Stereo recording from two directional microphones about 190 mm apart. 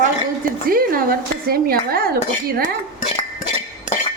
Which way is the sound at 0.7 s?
50° right (ahead or behind).